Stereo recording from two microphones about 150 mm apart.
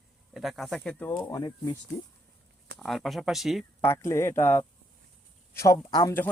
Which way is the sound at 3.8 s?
15° left (ahead or behind).